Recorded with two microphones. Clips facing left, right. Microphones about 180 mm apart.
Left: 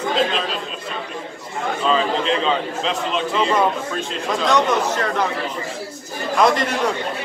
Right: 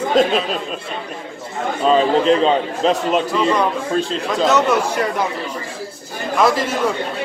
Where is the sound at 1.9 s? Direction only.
45° right (ahead or behind).